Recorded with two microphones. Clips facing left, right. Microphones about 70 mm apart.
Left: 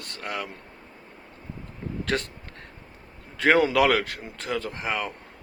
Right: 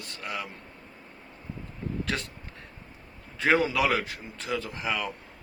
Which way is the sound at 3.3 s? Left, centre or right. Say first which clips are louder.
Left 4 dB; left.